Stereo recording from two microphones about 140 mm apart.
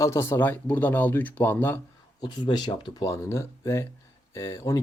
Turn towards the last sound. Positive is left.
turn(degrees=20)  # may be behind; listen again after turning